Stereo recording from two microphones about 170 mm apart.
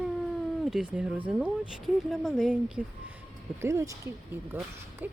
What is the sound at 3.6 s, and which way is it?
Speech, 15° right (ahead or behind).